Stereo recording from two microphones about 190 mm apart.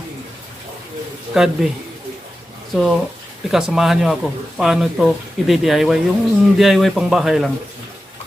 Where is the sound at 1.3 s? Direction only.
5° right (ahead or behind).